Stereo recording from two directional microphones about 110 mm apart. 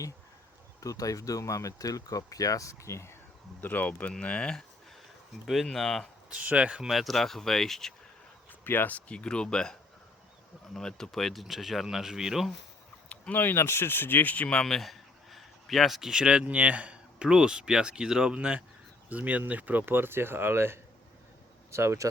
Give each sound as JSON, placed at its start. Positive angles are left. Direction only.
{"t": 0.8, "sound": "speech", "side_deg": 30}
{"t": 6.3, "sound": "speech", "side_deg": -10}
{"t": 8.6, "sound": "speech", "side_deg": 20}
{"t": 10.8, "sound": "speech", "side_deg": 5}
{"t": 13.1, "sound": "speech", "side_deg": 15}